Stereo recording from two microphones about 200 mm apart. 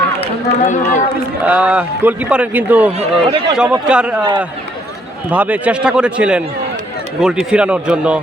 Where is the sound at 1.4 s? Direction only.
5° right (ahead or behind).